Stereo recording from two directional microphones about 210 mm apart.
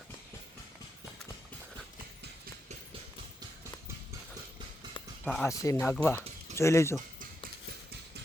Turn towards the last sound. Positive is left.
turn(degrees=15)  # may be behind; listen again after turning